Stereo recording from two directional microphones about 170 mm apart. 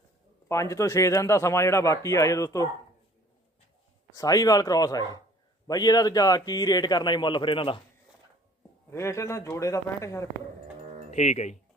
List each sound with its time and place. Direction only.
0.4 s a man's voice: 20° left (ahead or behind)
4.1 s a man's voice: 20° left (ahead or behind)
8.9 s a man's voice: 15° left (ahead or behind)
11.1 s speech: 40° left (ahead or behind)